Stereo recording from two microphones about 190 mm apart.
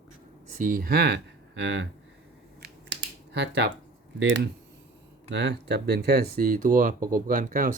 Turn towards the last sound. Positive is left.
turn(degrees=-45)  # may be behind; listen again after turning